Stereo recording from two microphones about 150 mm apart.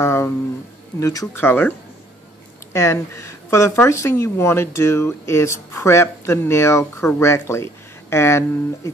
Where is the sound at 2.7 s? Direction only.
20° left (ahead or behind).